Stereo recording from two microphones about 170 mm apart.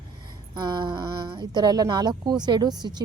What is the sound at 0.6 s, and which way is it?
A woman's voice, 25° right (ahead or behind).